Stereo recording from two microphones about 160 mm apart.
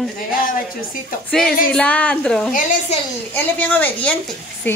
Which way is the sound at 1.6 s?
10° left (ahead or behind).